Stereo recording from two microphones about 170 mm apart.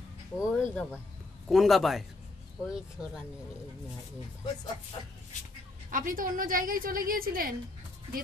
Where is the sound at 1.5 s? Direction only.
Centre (ahead or behind).